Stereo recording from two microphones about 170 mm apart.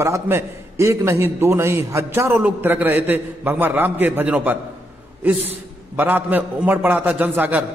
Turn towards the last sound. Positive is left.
turn(degrees=-10)  # may be behind; listen again after turning